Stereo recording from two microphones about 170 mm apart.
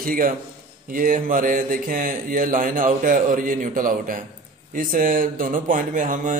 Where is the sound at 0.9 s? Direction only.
55° right (ahead or behind).